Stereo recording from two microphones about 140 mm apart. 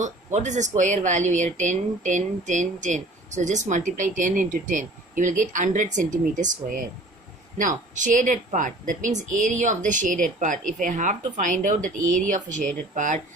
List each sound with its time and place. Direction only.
0.0 s speech: 60° right (ahead or behind)